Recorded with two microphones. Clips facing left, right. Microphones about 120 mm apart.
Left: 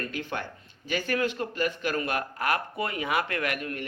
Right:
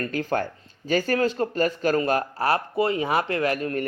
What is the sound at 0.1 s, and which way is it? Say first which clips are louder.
Speech: right 8 dB; 40° right (ahead or behind).